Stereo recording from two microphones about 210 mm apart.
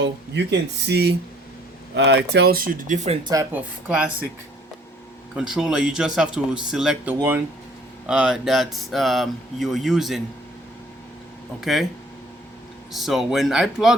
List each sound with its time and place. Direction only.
0.0 s speech: 55° right (ahead or behind); by 3.2 s 35° right (ahead or behind)
3.2 s speech: 15° right (ahead or behind)
3.8 s speech: 5° right (ahead or behind)
5.3 s speech: 5° right (ahead or behind)
11.6 s speech: centre (ahead or behind)
12.9 s speech: centre (ahead or behind)